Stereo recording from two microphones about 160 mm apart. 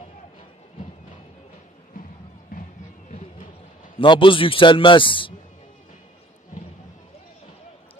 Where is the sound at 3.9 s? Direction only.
30° left (ahead or behind).